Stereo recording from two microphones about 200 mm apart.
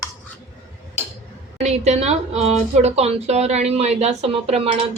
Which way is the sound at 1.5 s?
35° right (ahead or behind).